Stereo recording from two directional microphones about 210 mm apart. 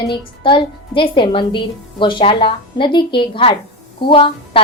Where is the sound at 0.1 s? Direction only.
25° left (ahead or behind).